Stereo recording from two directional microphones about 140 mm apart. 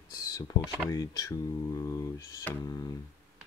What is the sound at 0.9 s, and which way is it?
Speech, 25° left (ahead or behind).